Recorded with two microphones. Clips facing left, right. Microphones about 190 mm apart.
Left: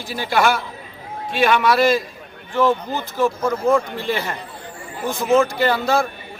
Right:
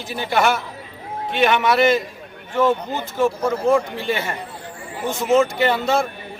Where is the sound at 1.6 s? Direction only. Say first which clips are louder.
Even; 20° right (ahead or behind).